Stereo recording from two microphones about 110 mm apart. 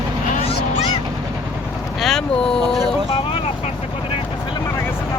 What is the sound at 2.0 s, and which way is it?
Vehicle, centre (ahead or behind).